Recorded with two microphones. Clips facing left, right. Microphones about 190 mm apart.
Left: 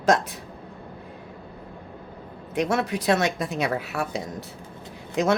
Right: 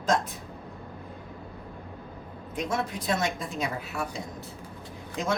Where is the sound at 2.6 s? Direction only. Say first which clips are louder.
Left 6 dB; 75° left (ahead or behind).